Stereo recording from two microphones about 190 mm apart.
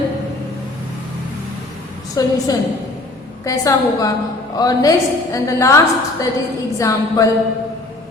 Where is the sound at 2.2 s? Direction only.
20° left (ahead or behind).